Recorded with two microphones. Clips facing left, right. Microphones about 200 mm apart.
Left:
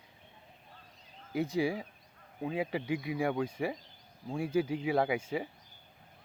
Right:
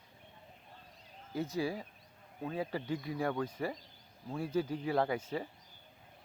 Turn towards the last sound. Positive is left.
turn(degrees=10)  # may be behind; listen again after turning